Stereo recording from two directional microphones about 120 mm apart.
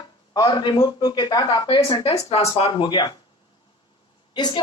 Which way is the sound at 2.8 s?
40° left (ahead or behind).